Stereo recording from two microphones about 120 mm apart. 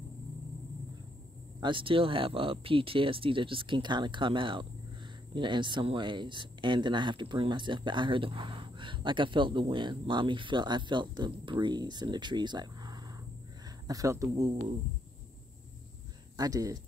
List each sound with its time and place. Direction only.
1.6 s speech: 45° right (ahead or behind); by 14.5 s 25° right (ahead or behind)
16.3 s speech: 30° right (ahead or behind)